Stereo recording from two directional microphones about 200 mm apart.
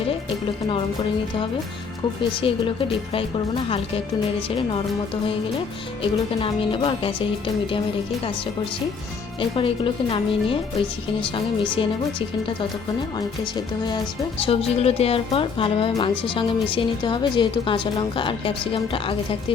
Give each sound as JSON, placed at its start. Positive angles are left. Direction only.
{"t": 0.1, "sound": "music", "side_deg": 25}
{"t": 2.3, "sound": "speech", "side_deg": 25}
{"t": 3.7, "sound": "speech", "side_deg": 25}
{"t": 9.4, "sound": "speech", "side_deg": 25}
{"t": 13.1, "sound": "speech", "side_deg": 20}